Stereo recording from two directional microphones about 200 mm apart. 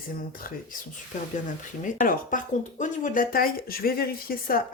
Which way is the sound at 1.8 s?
40° left (ahead or behind).